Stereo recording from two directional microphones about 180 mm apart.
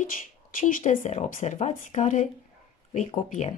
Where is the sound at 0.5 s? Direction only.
45° left (ahead or behind).